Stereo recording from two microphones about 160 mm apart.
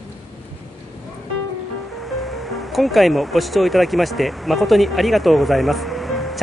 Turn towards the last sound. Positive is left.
turn(degrees=0)  # may be behind; listen again after turning